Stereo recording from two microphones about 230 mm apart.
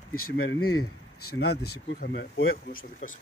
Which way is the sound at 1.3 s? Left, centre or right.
Left.